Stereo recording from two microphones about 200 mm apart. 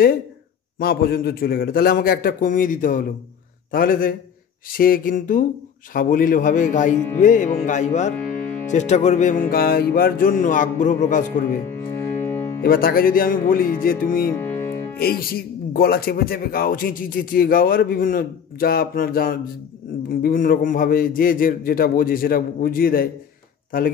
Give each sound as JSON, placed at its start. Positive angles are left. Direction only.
{"t": 0.7, "sound": "speech", "side_deg": 50}
{"t": 5.9, "sound": "music", "side_deg": 45}
{"t": 8.2, "sound": "music", "side_deg": 10}
{"t": 8.6, "sound": "music", "side_deg": 35}
{"t": 11.7, "sound": "music", "side_deg": 10}
{"t": 12.6, "sound": "speech", "side_deg": 45}
{"t": 14.3, "sound": "music", "side_deg": 10}
{"t": 15.0, "sound": "speech", "side_deg": 50}